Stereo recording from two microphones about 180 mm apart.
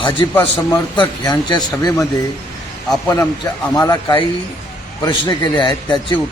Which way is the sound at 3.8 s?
20° left (ahead or behind).